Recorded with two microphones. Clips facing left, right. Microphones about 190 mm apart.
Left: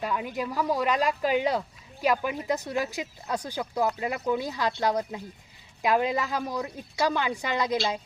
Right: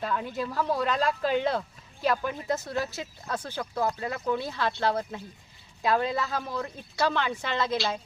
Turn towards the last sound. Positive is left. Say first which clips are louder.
# left 1 dB
turn(degrees=15)  # may be behind; listen again after turning